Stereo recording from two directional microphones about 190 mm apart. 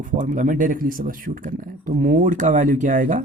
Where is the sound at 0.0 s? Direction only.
40° right (ahead or behind).